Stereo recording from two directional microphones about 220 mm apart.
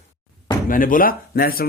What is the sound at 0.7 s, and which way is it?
Speech, 40° left (ahead or behind).